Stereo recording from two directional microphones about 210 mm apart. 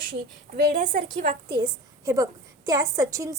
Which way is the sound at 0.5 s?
40° right (ahead or behind).